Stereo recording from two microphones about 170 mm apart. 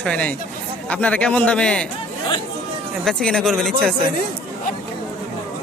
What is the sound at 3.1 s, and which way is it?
Speech, 5° left (ahead or behind).